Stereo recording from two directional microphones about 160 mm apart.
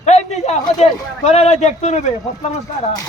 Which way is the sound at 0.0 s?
45° left (ahead or behind).